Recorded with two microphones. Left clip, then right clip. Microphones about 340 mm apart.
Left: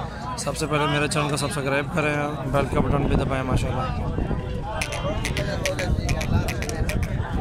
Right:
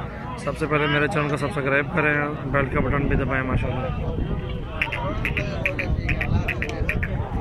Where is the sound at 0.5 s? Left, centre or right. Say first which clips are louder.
Right 2 dB; centre.